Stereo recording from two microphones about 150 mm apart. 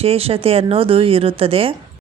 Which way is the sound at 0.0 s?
40° right (ahead or behind).